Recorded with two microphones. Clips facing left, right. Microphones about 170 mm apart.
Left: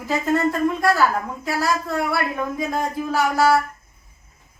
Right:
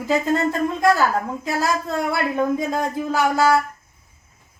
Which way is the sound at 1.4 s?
20° right (ahead or behind).